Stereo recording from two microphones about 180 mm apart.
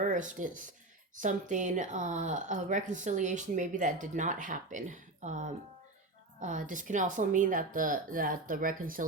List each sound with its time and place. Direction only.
0.0 s speech: 45° right (ahead or behind)